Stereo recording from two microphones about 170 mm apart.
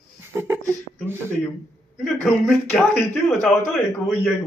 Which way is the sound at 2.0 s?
5° left (ahead or behind).